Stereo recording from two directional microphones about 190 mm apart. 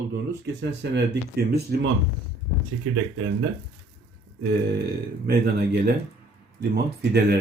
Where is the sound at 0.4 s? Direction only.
65° right (ahead or behind).